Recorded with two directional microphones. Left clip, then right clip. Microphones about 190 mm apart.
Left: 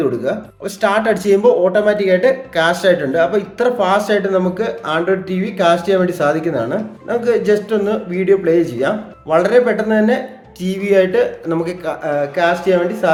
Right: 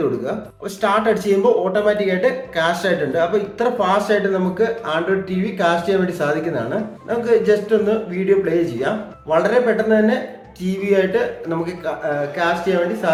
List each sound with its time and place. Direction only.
0.8 s speech: 45° left (ahead or behind)